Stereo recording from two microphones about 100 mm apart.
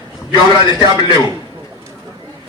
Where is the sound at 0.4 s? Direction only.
50° left (ahead or behind).